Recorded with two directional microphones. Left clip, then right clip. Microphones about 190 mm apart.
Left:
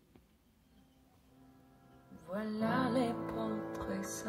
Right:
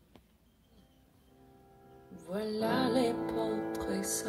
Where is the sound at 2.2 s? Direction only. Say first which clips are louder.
Right 4 dB; 20° right (ahead or behind).